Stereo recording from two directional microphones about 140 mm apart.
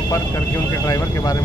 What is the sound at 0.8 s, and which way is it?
Speech, 25° left (ahead or behind).